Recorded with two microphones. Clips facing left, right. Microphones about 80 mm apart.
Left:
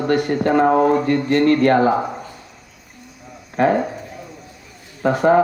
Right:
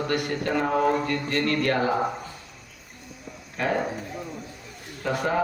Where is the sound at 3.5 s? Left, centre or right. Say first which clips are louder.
Left 10 dB; left.